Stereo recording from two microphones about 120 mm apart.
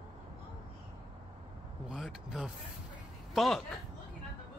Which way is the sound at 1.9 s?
5° right (ahead or behind).